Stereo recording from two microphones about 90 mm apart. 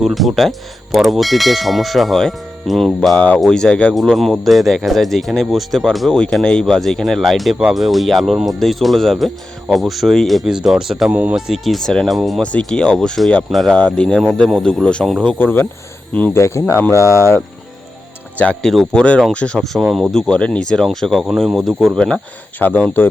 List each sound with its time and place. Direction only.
0.0 s speech: centre (ahead or behind)
11.1 s speech: 15° right (ahead or behind)
12.4 s speech: 10° left (ahead or behind)
16.1 s speech: 20° left (ahead or behind)
16.4 s speech: 30° left (ahead or behind)
18.6 s speech: 5° left (ahead or behind); by 23.0 s 20° left (ahead or behind)